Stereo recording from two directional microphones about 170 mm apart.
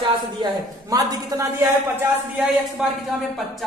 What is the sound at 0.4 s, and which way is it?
A man's voice, 20° right (ahead or behind).